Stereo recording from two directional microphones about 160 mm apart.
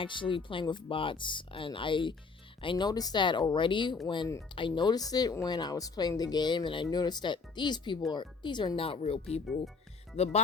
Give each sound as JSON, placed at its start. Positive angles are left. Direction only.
{"t": 0.0, "sound": "speech", "side_deg": 30}